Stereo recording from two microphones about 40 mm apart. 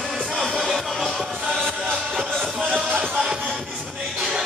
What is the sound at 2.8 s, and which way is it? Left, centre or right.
Music, right.